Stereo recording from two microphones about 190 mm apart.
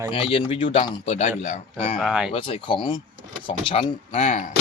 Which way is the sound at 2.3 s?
30° left (ahead or behind).